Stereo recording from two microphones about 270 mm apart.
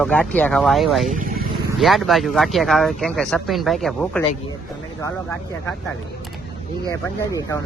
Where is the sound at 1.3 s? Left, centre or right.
Right.